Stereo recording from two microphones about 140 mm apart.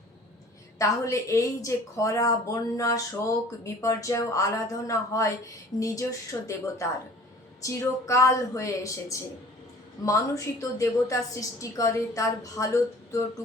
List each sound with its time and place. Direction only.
0.8 s a woman's voice: 20° left (ahead or behind)